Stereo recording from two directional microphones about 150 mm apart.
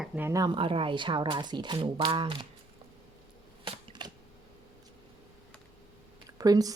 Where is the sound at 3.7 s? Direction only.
30° right (ahead or behind).